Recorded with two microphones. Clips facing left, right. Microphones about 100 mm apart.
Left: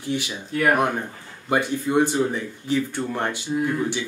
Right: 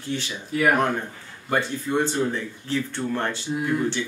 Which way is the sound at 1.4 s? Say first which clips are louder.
Left 3 dB; 15° left (ahead or behind).